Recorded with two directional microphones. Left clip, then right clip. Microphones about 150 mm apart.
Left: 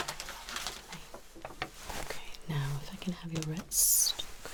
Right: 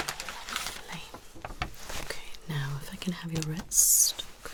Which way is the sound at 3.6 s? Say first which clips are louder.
Right 5 dB; 5° left (ahead or behind).